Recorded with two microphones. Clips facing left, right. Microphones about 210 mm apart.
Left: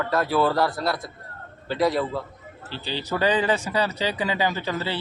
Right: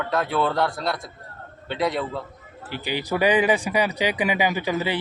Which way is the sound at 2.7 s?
15° right (ahead or behind).